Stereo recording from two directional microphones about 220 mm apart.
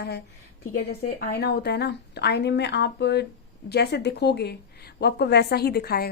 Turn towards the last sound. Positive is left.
turn(degrees=45)  # may be behind; listen again after turning